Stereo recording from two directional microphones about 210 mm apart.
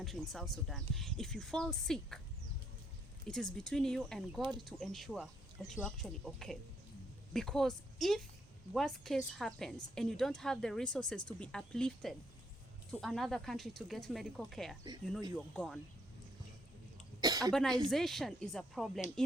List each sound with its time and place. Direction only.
0.0 s speech: centre (ahead or behind)
3.2 s speech: centre (ahead or behind)
17.2 s cough: 20° right (ahead or behind)
17.5 s speech: 5° left (ahead or behind)